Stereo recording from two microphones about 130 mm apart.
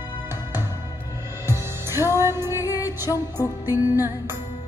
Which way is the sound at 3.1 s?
25° left (ahead or behind).